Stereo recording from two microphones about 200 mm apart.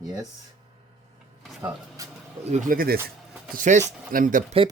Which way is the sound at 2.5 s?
40° right (ahead or behind).